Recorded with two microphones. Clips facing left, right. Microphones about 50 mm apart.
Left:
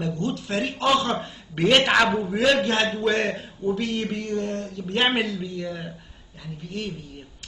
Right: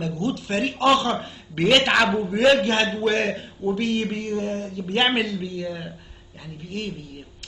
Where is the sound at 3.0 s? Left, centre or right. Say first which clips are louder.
Right 1 dB; right.